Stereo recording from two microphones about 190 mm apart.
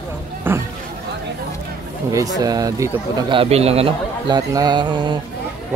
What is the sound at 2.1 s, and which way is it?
Speech, 20° right (ahead or behind).